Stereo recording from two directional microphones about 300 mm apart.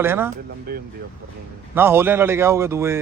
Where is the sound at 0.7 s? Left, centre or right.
Right.